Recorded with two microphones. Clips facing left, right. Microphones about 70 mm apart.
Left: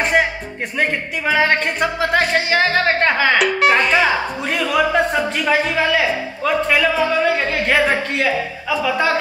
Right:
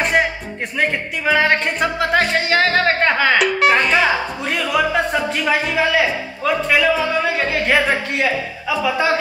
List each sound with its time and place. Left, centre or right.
0.0 s music: centre
0.7 s speech: centre